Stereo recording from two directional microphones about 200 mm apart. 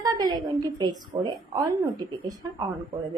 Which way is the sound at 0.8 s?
20° right (ahead or behind).